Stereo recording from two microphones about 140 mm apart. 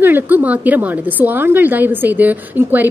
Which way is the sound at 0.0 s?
15° right (ahead or behind).